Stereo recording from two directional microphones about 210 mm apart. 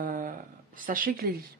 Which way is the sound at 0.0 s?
40° right (ahead or behind).